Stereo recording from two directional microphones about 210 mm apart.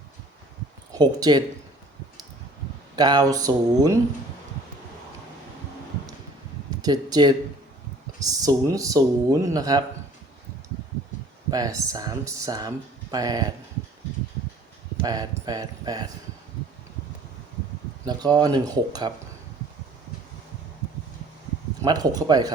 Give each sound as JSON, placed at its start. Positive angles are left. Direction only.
{"t": 0.9, "sound": "speech", "side_deg": -20}
{"t": 2.9, "sound": "speech", "side_deg": -20}
{"t": 6.8, "sound": "speech", "side_deg": -20}
{"t": 11.5, "sound": "speech", "side_deg": -15}
{"t": 15.0, "sound": "speech", "side_deg": -20}
{"t": 18.0, "sound": "speech", "side_deg": -20}
{"t": 21.8, "sound": "speech", "side_deg": -20}